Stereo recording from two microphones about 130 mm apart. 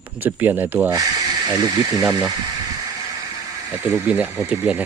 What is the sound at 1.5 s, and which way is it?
Speech, 30° right (ahead or behind).